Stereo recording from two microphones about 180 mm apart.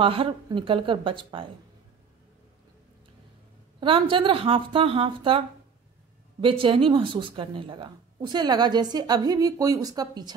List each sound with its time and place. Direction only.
0.0 s speech: 30° right (ahead or behind)
3.8 s speech: 30° right (ahead or behind)
6.4 s speech: 30° right (ahead or behind)